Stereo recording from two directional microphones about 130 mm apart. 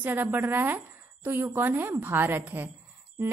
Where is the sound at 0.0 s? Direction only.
15° right (ahead or behind).